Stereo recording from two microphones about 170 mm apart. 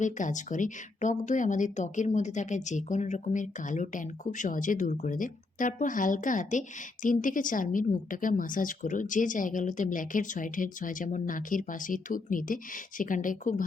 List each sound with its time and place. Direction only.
0.0 s speech: 45° left (ahead or behind)